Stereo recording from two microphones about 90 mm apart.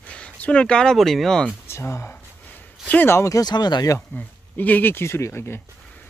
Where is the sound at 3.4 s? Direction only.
50° left (ahead or behind).